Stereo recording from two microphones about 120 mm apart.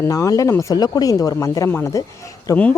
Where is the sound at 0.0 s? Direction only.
25° left (ahead or behind).